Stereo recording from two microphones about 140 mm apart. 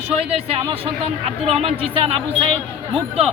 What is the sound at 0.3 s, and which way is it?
Speech, 45° right (ahead or behind).